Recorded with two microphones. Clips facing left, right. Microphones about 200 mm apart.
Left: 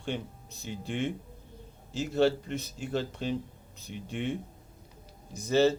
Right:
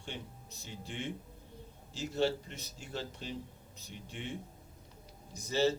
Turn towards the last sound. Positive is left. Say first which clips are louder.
# left 7 dB
turn(degrees=60)  # may be behind; listen again after turning